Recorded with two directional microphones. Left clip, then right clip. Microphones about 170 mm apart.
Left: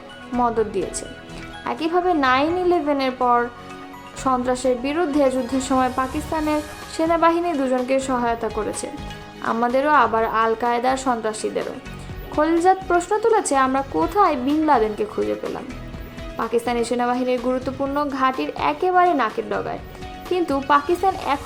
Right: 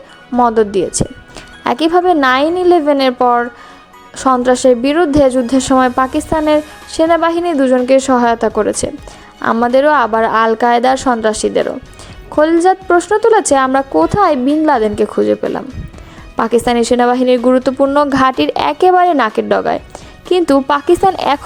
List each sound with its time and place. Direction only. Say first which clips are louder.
0.3 s a woman's voice: right 9 dB; 45° right (ahead or behind)
16.4 s a woman's voice: right 9 dB; 50° right (ahead or behind)